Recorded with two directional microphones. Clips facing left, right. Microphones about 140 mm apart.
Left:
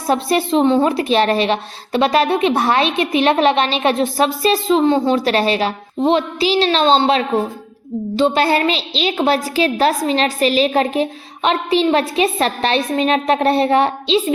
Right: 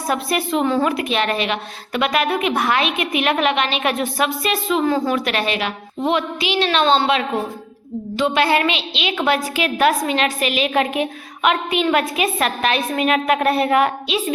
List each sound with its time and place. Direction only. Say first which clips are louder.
0.1 s a woman's voice: left 5 dB; 30° left (ahead or behind)